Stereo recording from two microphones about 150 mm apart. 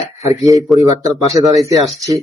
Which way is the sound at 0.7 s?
Centre (ahead or behind).